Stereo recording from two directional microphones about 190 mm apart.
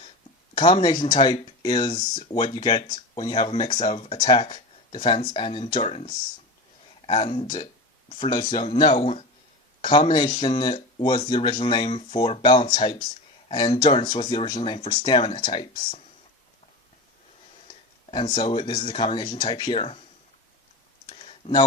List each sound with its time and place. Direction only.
0.5 s speech: 25° left (ahead or behind)
18.1 s speech: 25° left (ahead or behind)
21.1 s clicking: 30° left (ahead or behind)